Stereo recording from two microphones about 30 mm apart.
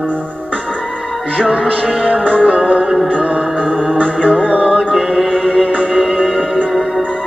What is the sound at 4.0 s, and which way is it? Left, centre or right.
Music, left.